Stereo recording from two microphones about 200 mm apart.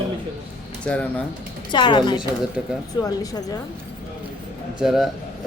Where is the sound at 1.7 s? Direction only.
25° left (ahead or behind).